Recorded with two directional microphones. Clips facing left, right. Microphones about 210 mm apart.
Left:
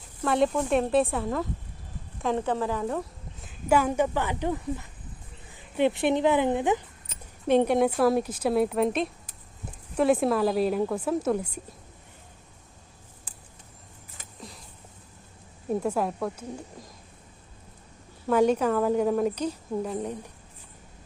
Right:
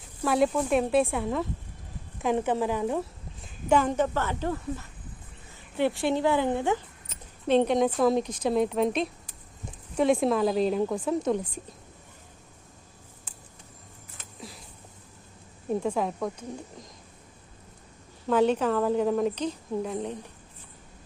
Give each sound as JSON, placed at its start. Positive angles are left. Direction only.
{"t": 0.3, "sound": "speech", "side_deg": -5}
{"t": 2.2, "sound": "speech", "side_deg": -15}
{"t": 3.4, "sound": "a woman's voice", "side_deg": 10}
{"t": 15.7, "sound": "speech", "side_deg": 5}
{"t": 18.3, "sound": "a woman's voice", "side_deg": 10}